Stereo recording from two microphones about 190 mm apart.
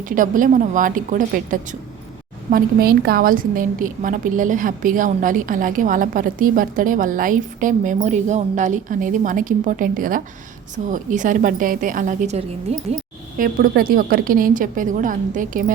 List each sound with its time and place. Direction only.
0.0 s a woman's voice: 45° right (ahead or behind)
13.4 s a woman's voice: 50° right (ahead or behind)